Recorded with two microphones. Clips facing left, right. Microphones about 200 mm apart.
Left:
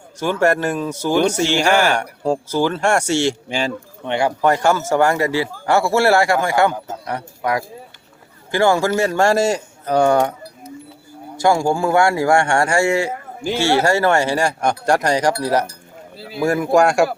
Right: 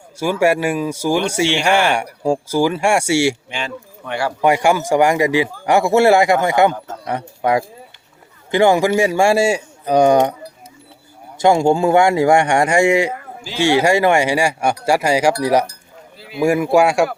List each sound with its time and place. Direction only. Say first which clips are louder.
0.2 s speech: right 1 dB; 10° right (ahead or behind)
4.0 s speech: left 3 dB; 20° left (ahead or behind)
4.4 s speech: right 5 dB; 10° right (ahead or behind)
11.3 s speech: right 3 dB; 20° right (ahead or behind)
16.1 s a sound: left 2 dB; 35° left (ahead or behind)
16.4 s speech: right 1 dB; 10° right (ahead or behind)